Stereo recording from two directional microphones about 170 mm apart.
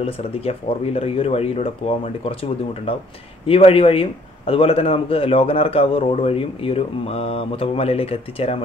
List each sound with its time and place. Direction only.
0.0 s a man's voice: 35° left (ahead or behind)